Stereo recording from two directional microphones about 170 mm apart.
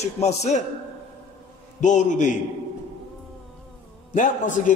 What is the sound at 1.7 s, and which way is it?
Speech, 45° left (ahead or behind).